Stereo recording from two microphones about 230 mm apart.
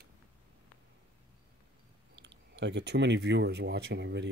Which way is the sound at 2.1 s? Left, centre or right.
Right.